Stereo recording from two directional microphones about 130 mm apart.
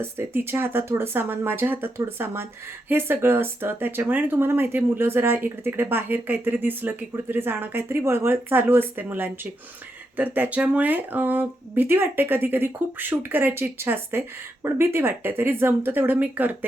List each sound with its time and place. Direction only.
0.0 s speech: 15° right (ahead or behind)